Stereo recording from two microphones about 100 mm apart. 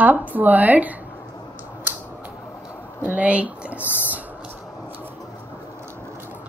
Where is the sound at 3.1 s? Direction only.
15° right (ahead or behind).